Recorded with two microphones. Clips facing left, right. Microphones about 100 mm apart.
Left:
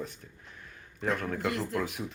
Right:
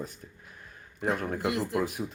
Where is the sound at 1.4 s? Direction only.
15° right (ahead or behind).